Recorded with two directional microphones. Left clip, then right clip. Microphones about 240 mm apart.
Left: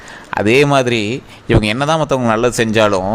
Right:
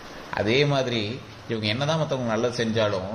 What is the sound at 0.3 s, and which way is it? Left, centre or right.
Speech, left.